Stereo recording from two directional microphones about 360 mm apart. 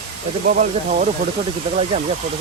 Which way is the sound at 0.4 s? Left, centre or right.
Right.